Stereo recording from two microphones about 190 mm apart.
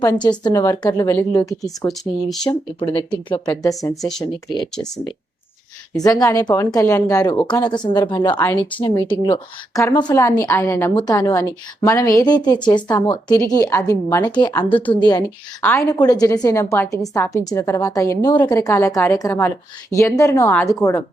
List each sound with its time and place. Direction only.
0.0 s speech: 20° left (ahead or behind)
1.9 s speech: centre (ahead or behind)
2.5 s speech: 25° left (ahead or behind)
4.7 s speech: 5° left (ahead or behind)
5.9 s a woman's voice: 20° left (ahead or behind)
14.3 s a woman's voice: 20° left (ahead or behind)